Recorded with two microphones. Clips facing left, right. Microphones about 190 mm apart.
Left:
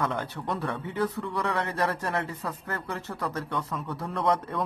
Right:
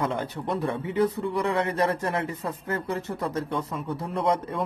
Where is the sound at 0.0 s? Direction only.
20° right (ahead or behind).